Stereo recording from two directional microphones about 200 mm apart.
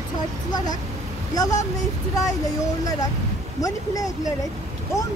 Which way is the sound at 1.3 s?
20° left (ahead or behind).